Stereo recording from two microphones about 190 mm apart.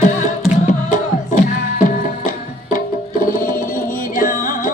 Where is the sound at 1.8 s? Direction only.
45° left (ahead or behind).